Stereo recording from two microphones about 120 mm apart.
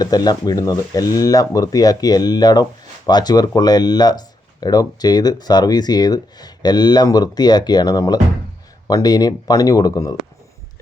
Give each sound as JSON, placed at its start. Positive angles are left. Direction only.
{"t": 0.0, "sound": "speech", "side_deg": 35}